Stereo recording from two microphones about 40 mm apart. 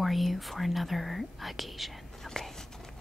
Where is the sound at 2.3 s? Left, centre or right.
Centre.